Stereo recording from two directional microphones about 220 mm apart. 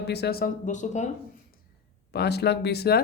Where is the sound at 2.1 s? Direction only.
50° left (ahead or behind).